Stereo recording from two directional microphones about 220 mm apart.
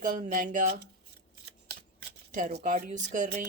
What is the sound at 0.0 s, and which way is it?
Speech, 35° right (ahead or behind).